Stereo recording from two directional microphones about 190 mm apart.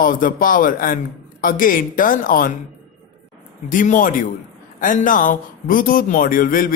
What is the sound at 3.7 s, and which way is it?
A man's voice, 45° left (ahead or behind).